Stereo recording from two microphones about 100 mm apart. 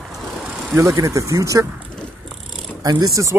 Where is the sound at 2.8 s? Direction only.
35° right (ahead or behind).